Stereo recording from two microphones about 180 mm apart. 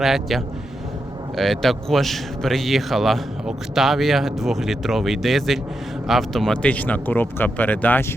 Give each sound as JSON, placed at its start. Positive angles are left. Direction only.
{"t": 0.0, "sound": "a man's voice", "side_deg": 0}